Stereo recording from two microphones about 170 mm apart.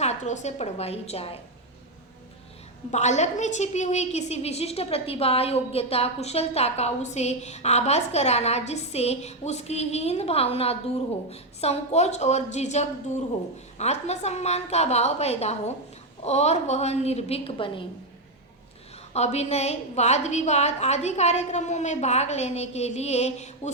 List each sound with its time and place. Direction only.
0.0 s a woman's voice: 40° left (ahead or behind)
2.9 s a woman's voice: 45° left (ahead or behind)
19.1 s a woman's voice: 40° left (ahead or behind)